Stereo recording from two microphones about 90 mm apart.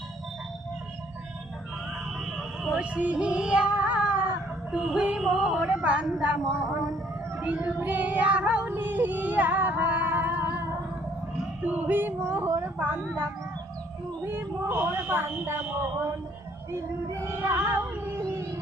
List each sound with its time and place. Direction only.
2.1 s music: centre (ahead or behind)
4.7 s a woman's voice: 5° right (ahead or behind)
5.6 s a woman's voice: 15° right (ahead or behind)
7.5 s child singing: 20° right (ahead or behind)
11.6 s speech: 20° right (ahead or behind)
12.6 s speech: 20° right (ahead or behind)
14.3 s speech: 25° right (ahead or behind)
17.2 s speech: 30° right (ahead or behind)